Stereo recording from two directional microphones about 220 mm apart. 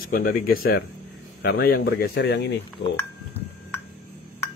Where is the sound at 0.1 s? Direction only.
40° left (ahead or behind).